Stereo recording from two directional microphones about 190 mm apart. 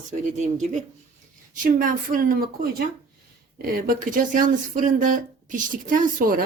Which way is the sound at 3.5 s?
50° right (ahead or behind).